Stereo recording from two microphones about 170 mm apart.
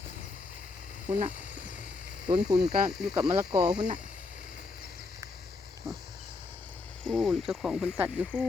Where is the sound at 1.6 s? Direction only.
50° left (ahead or behind).